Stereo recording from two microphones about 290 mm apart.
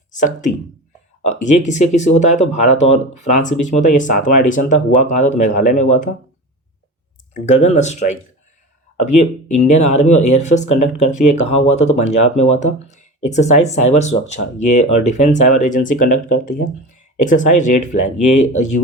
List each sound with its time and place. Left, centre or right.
0.1 s speech: left
7.3 s speech: left